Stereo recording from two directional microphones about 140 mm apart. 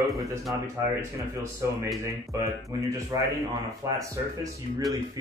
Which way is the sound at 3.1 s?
20° right (ahead or behind).